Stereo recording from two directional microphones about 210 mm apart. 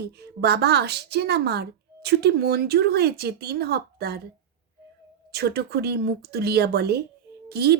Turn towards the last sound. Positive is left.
turn(degrees=-50)  # may be behind; listen again after turning